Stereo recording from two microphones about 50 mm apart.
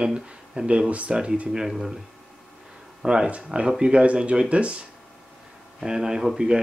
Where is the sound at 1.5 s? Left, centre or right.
Centre.